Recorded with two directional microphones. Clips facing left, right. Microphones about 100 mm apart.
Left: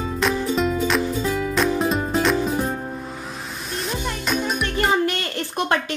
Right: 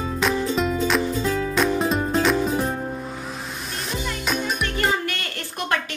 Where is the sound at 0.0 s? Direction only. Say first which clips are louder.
Even; centre (ahead or behind).